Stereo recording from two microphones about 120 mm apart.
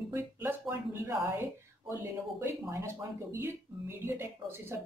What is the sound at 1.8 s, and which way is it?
Speech, 20° right (ahead or behind).